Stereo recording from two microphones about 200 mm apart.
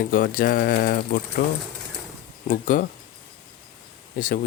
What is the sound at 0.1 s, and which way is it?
Speech, 45° left (ahead or behind).